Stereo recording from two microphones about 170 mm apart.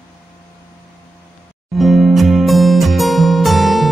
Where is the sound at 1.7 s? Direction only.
Centre (ahead or behind).